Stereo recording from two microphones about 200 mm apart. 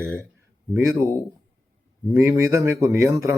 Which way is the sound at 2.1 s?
15° right (ahead or behind).